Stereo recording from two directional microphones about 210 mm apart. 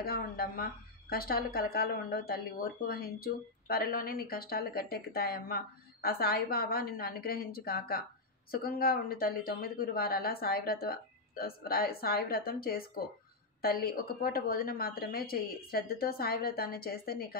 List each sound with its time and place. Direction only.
0.0 s speech: 45° left (ahead or behind)